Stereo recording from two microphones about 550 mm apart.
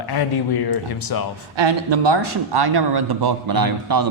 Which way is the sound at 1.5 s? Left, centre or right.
Right.